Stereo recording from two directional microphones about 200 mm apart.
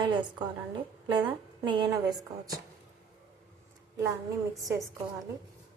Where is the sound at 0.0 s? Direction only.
25° right (ahead or behind).